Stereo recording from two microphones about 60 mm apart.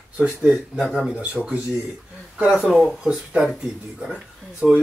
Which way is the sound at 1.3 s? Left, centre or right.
Right.